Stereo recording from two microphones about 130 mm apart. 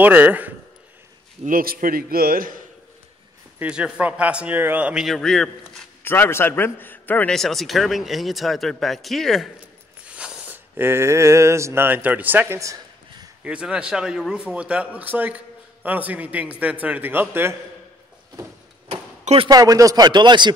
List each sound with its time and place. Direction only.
0.0 s a man's voice: 15° right (ahead or behind)
1.4 s a man's voice: 90° right
3.5 s a man's voice: 10° right (ahead or behind)
6.0 s a man's voice: 20° left (ahead or behind)
7.3 s speech: centre (ahead or behind)
10.0 s a sound: 10° right (ahead or behind)
13.4 s a man's voice: 10° right (ahead or behind)
18.9 s a sound: 45° right (ahead or behind)
19.5 s speech: 25° right (ahead or behind)